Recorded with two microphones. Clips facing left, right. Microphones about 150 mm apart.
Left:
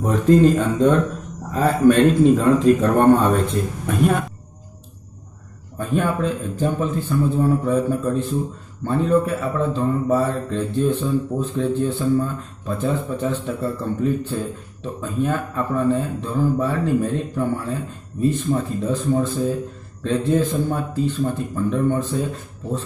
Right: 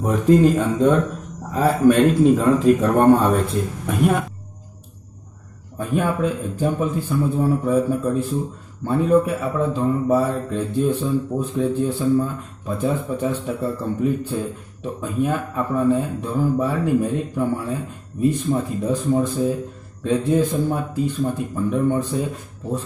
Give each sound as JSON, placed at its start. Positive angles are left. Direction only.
{"t": 0.0, "sound": "a man's voice", "side_deg": -10}
{"t": 5.8, "sound": "a man's voice", "side_deg": -10}